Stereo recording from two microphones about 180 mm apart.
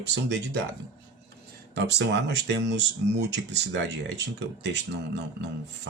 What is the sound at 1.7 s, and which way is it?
Speech, 70° right (ahead or behind).